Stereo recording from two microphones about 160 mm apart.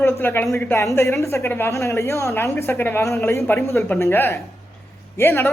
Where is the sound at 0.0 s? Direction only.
15° left (ahead or behind).